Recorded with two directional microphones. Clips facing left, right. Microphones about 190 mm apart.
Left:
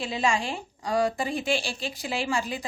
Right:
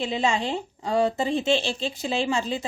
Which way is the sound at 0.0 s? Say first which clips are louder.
Right 2 dB; 20° right (ahead or behind).